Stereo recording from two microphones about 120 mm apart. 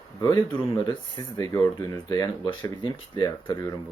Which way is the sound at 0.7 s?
35° left (ahead or behind).